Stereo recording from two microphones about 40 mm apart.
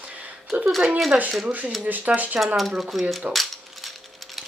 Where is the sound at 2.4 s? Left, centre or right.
Centre.